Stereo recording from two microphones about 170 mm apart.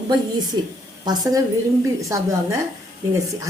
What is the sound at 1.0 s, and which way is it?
A woman's voice, 20° right (ahead or behind).